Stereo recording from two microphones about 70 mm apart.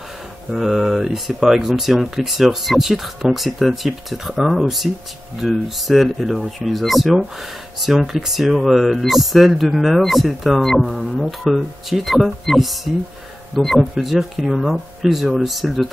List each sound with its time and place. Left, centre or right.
0.5 s speech: centre